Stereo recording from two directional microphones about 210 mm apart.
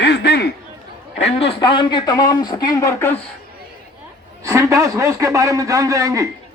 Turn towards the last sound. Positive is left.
turn(degrees=-15)  # may be behind; listen again after turning